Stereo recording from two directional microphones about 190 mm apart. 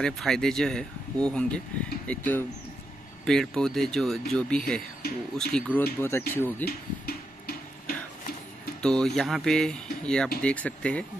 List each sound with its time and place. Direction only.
0.0 s speech: 5° left (ahead or behind)
6.6 s a sound: 55° left (ahead or behind)
8.8 s speech: 5° left (ahead or behind)